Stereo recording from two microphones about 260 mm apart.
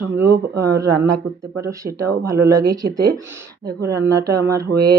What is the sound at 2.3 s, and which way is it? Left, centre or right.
Speech, right.